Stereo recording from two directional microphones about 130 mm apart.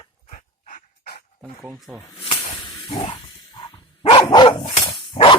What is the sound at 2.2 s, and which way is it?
Snake, 40° left (ahead or behind).